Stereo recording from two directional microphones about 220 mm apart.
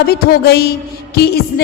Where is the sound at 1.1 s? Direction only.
45° left (ahead or behind).